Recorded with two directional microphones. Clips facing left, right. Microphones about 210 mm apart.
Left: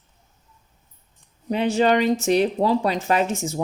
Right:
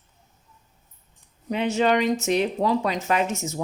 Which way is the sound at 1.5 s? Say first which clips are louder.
Left 2 dB; 35° left (ahead or behind).